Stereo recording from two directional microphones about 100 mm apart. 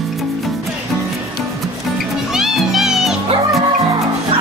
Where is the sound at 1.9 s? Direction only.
Centre (ahead or behind).